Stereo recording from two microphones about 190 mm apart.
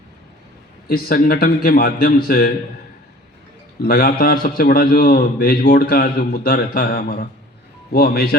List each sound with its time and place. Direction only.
0.9 s a man's voice: 50° left (ahead or behind)
3.8 s a man's voice: 50° left (ahead or behind)